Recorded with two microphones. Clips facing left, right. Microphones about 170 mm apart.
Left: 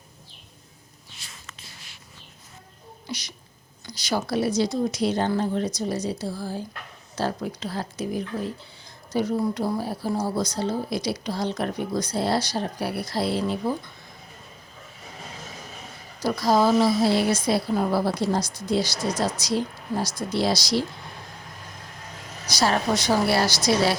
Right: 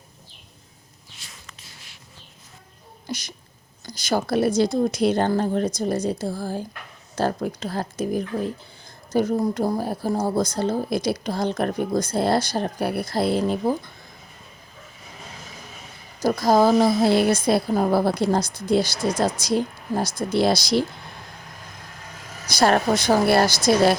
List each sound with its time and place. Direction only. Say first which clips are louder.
3.1 s speech: right 3 dB; 50° right (ahead or behind)
16.2 s speech: right 3 dB; 50° right (ahead or behind)
22.4 s speech: right 4 dB; 55° right (ahead or behind)